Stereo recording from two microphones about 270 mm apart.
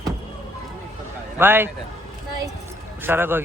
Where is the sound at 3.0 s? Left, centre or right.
Centre.